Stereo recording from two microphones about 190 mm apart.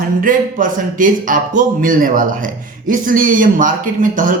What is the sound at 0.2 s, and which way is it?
A man's voice, 45° right (ahead or behind).